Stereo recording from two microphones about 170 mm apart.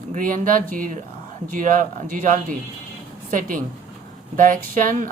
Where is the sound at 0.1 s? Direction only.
55° right (ahead or behind).